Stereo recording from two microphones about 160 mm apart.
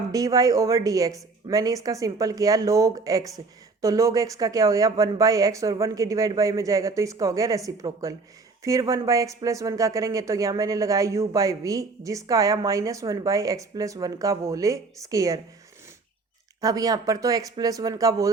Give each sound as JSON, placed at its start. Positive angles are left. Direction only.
{"t": 0.1, "sound": "speech", "side_deg": -20}
{"t": 16.6, "sound": "speech", "side_deg": -20}